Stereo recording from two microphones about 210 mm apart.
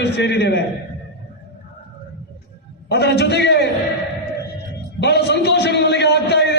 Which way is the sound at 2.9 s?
50° left (ahead or behind).